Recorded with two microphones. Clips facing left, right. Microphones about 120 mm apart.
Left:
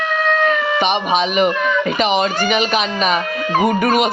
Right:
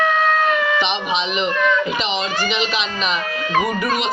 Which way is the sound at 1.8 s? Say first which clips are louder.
Left 6 dB; 55° left (ahead or behind).